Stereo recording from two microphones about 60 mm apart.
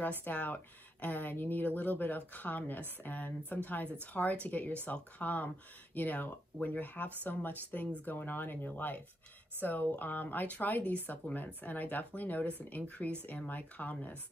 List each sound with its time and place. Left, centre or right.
0.2 s speech: left